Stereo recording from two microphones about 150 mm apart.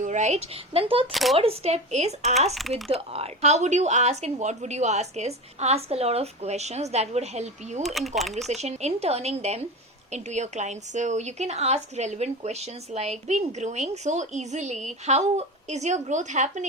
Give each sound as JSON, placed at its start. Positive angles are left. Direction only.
{"t": 0.0, "sound": "a woman's voice", "side_deg": -55}
{"t": 1.1, "sound": "speech", "side_deg": 0}
{"t": 1.4, "sound": "a woman's voice", "side_deg": -40}
{"t": 2.6, "sound": "speech", "side_deg": 0}
{"t": 2.9, "sound": "a woman's voice", "side_deg": -40}
{"t": 7.8, "sound": "speech", "side_deg": 0}
{"t": 8.6, "sound": "a woman's voice", "side_deg": -45}